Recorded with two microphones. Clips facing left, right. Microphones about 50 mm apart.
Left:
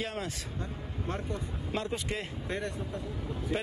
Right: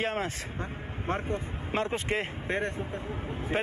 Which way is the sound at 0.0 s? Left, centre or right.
Right.